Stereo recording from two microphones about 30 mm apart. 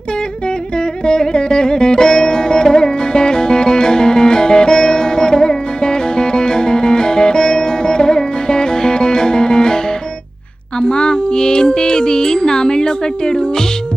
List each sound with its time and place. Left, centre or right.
1.0 s music: left